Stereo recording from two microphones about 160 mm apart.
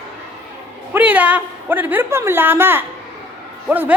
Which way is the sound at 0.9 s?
10° right (ahead or behind).